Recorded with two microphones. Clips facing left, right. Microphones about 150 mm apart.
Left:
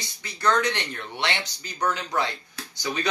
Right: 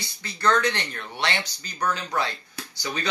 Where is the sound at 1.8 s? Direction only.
20° left (ahead or behind).